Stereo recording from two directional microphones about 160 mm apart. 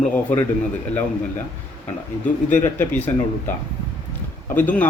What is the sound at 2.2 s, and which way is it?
Speech, 50° left (ahead or behind).